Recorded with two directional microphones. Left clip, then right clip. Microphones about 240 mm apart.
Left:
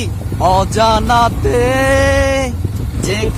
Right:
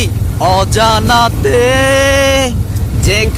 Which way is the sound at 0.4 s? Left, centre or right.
Centre.